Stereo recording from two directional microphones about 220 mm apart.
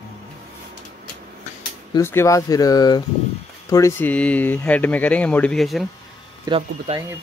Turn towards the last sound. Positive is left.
turn(degrees=-20)  # may be behind; listen again after turning